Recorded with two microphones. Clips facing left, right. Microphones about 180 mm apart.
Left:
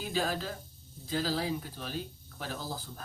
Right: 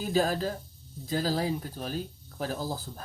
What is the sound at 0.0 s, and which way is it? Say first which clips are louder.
Speech: right 6 dB; 45° right (ahead or behind).